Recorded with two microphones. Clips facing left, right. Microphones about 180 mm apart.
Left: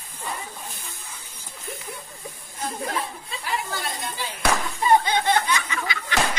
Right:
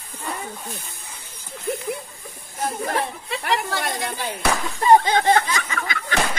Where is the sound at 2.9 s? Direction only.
70° right (ahead or behind).